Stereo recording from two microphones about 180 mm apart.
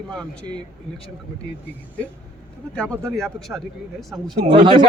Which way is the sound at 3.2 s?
Centre (ahead or behind).